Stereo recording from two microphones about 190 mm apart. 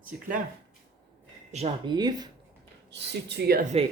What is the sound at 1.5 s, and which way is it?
Speech, 35° right (ahead or behind).